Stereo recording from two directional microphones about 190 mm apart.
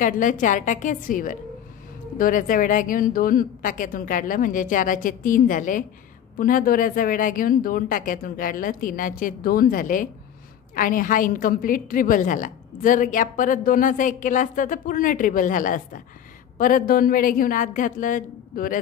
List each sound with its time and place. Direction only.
0.0 s a woman's voice: 45° left (ahead or behind)